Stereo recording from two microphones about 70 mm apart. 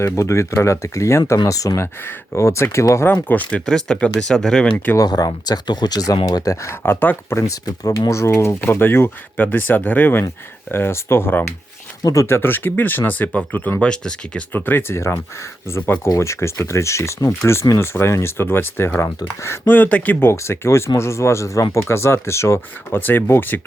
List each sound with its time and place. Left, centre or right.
0.0 s speech: left
3.2 s speech: left
3.7 s speech: centre
4.9 s speech: left
6.8 s speech: left
7.5 s speech: left
8.1 s speech: left
8.6 s speech: left
13.8 s speech: centre
14.5 s speech: left
19.7 s speech: left
20.2 s speech: left
23.0 s speech: left